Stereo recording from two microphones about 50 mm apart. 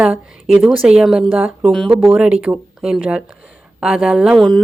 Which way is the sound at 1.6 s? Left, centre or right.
Centre.